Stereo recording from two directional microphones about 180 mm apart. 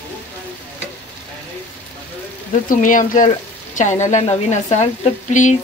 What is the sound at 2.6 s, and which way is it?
A woman's voice, 45° left (ahead or behind).